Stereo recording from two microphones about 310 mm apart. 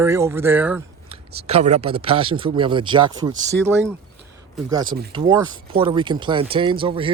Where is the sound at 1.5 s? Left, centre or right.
Right.